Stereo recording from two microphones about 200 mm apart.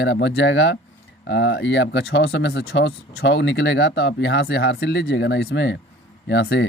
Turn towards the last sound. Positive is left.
turn(degrees=65)  # may be behind; listen again after turning